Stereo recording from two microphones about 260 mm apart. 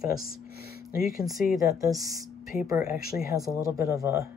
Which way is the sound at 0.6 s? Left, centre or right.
Left.